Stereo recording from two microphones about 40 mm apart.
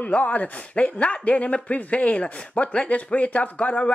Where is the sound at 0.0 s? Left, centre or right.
Left.